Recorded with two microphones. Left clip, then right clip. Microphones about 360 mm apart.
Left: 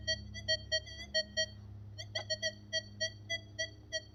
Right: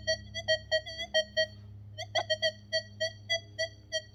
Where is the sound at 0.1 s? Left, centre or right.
Right.